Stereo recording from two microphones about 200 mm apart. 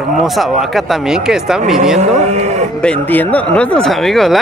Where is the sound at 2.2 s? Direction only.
35° right (ahead or behind).